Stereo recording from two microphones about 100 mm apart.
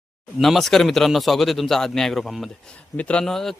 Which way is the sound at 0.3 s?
Centre (ahead or behind).